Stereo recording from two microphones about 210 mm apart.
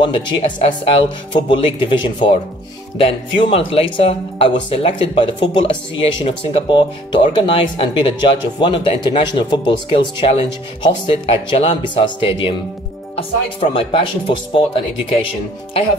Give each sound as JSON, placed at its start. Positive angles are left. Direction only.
{"t": 0.0, "sound": "speech", "side_deg": 20}